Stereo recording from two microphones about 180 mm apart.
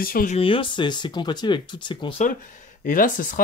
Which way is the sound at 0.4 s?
30° left (ahead or behind).